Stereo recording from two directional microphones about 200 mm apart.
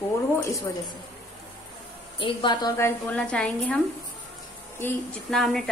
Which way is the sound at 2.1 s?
25° left (ahead or behind).